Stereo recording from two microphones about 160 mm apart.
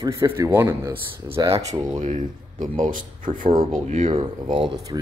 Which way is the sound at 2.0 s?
50° right (ahead or behind).